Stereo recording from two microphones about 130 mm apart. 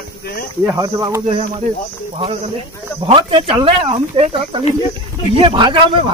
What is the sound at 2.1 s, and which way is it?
Speech, 50° right (ahead or behind).